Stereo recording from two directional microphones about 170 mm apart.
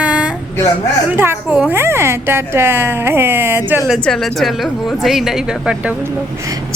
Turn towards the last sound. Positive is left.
turn(degrees=-20)  # may be behind; listen again after turning